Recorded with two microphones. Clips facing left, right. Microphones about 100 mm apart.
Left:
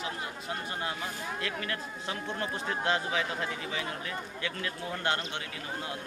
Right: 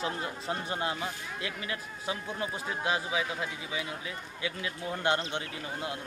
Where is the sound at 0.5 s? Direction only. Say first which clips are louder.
Right 3 dB; 25° right (ahead or behind).